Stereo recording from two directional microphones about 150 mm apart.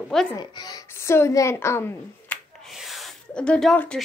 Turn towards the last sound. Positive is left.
turn(degrees=5)  # may be behind; listen again after turning